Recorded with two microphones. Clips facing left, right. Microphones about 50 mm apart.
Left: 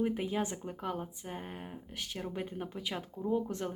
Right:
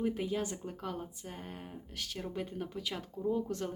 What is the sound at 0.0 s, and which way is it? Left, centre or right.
Speech, centre.